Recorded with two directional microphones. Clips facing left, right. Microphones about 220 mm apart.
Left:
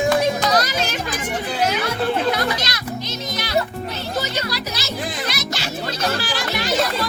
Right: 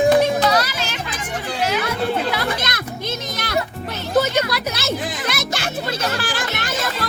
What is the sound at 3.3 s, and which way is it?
Music, 55° right (ahead or behind).